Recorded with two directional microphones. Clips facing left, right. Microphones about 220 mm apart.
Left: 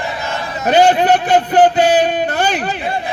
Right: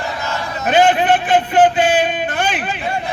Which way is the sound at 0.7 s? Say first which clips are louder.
Left 2 dB; 40° left (ahead or behind).